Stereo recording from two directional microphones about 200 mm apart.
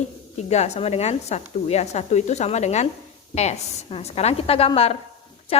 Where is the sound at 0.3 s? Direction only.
35° left (ahead or behind).